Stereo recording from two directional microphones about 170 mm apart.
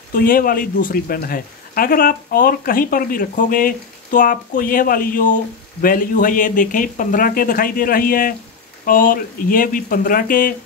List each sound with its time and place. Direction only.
0.1 s speech: 55° left (ahead or behind)